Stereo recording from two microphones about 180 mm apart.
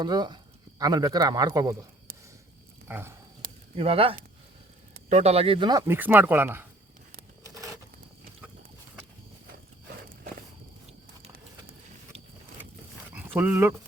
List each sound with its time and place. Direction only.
0.0 s speech: 25° right (ahead or behind)
2.8 s speech: 15° right (ahead or behind)
3.4 s snake: 50° right (ahead or behind)
3.8 s speech: 30° right (ahead or behind); by 6.7 s 10° right (ahead or behind)
7.4 s a sound: 20° right (ahead or behind)
13.1 s dog: 10° right (ahead or behind)